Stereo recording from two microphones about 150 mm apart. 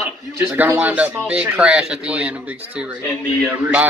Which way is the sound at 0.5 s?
10° right (ahead or behind).